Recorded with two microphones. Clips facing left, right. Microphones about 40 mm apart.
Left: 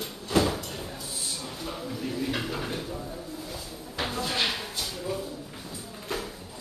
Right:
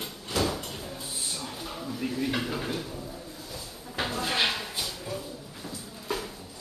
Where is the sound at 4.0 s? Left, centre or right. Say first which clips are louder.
Right 1 dB; centre.